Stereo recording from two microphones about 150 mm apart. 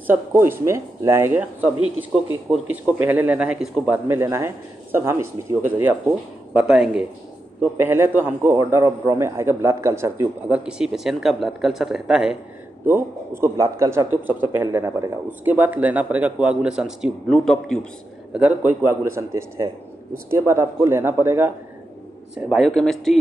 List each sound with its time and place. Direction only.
0.0 s a man's voice: 15° right (ahead or behind)
2.5 s a man's voice: 10° right (ahead or behind)
7.7 s a man's voice: 15° right (ahead or behind)
10.6 s speech: 5° right (ahead or behind)
12.8 s a man's voice: 15° right (ahead or behind); by 17.7 s 5° left (ahead or behind)
18.3 s a man's voice: 10° right (ahead or behind)
22.5 s speech: centre (ahead or behind)